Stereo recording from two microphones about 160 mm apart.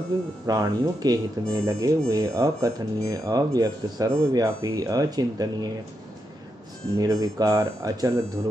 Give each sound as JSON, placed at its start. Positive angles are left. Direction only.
{"t": 0.5, "sound": "speech", "side_deg": -25}
{"t": 7.0, "sound": "speech", "side_deg": -25}